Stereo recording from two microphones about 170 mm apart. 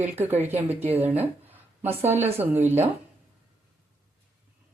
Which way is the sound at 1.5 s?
10° right (ahead or behind).